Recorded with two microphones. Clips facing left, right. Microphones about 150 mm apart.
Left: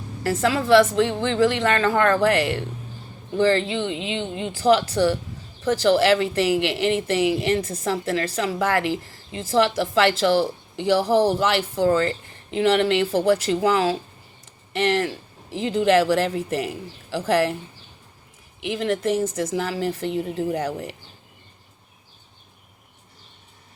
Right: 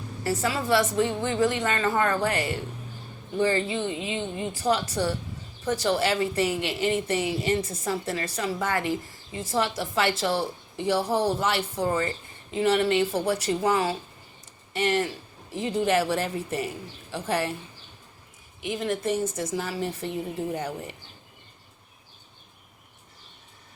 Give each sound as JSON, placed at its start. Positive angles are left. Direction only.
{"t": 0.2, "sound": "a woman's voice", "side_deg": 90}
{"t": 18.6, "sound": "a woman's voice", "side_deg": 90}